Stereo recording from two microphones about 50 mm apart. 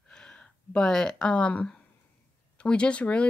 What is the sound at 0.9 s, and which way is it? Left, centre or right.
Speech, centre.